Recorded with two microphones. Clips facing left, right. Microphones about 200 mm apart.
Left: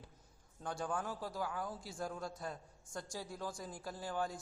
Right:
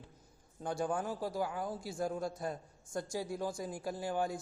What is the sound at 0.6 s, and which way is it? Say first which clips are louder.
A man's voice: right 5 dB; 10° right (ahead or behind).